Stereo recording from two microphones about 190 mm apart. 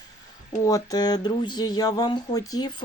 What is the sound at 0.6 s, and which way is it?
Speech, 20° left (ahead or behind).